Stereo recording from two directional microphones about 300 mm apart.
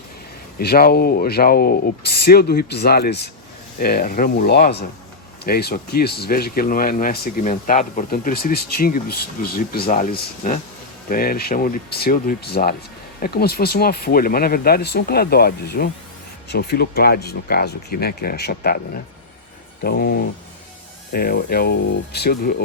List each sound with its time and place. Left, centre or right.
0.6 s speech: left
19.8 s speech: left